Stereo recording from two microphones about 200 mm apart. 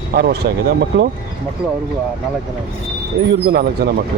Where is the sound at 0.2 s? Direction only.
50° right (ahead or behind).